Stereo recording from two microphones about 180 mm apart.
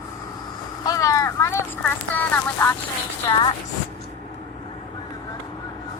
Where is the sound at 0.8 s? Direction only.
20° left (ahead or behind).